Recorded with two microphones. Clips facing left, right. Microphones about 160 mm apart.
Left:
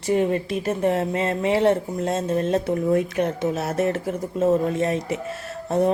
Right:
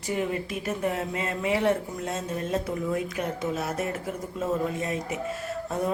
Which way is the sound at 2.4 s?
75° left (ahead or behind).